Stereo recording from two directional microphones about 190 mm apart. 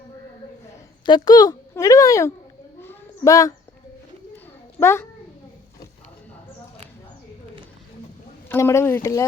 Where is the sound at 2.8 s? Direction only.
15° left (ahead or behind).